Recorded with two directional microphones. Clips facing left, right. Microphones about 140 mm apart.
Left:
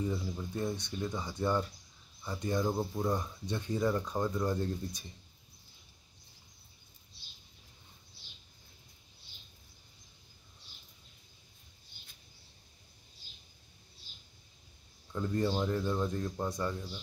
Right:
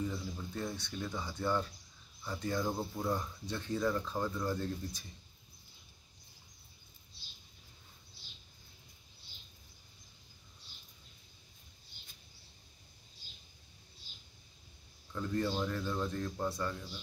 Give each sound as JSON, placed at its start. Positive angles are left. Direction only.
{"t": 0.1, "sound": "speech", "side_deg": 20}
{"t": 15.1, "sound": "speech", "side_deg": 15}